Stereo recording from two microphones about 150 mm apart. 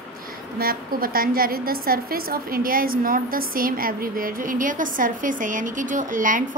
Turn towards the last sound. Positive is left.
turn(degrees=-60)  # may be behind; listen again after turning